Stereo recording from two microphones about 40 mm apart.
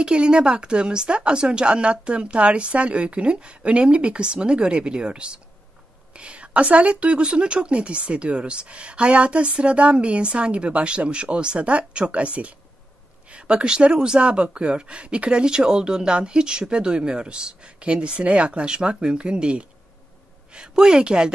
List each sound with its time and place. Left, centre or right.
0.0 s speech: right